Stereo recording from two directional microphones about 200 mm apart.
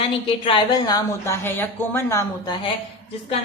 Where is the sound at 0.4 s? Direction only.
20° left (ahead or behind).